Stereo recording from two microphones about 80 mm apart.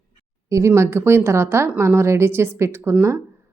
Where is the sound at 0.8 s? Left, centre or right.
Right.